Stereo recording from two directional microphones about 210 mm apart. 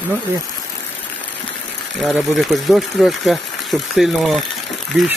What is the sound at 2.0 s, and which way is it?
Speech, centre (ahead or behind).